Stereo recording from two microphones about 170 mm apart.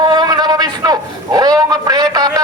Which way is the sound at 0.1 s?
25° right (ahead or behind).